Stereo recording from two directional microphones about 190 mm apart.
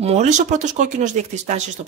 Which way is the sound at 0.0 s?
35° right (ahead or behind).